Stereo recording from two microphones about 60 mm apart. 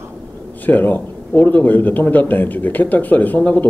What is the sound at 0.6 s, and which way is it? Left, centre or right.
A man's voice, left.